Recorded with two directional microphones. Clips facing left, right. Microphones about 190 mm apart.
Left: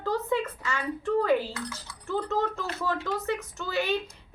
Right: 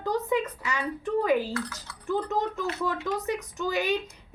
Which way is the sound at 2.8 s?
15° right (ahead or behind).